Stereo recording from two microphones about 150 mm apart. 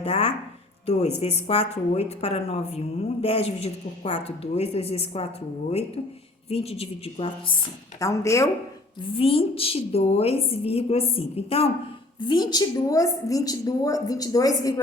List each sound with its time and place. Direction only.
0.0 s a woman's voice: 40° left (ahead or behind)
6.5 s a woman's voice: 40° left (ahead or behind)
7.9 s a woman's voice: 20° left (ahead or behind)
9.0 s a woman's voice: 35° left (ahead or behind)
12.2 s a woman's voice: 30° left (ahead or behind)